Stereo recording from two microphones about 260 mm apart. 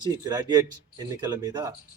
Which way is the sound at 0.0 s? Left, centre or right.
Centre.